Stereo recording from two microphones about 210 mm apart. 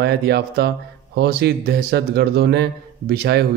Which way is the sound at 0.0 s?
50° right (ahead or behind).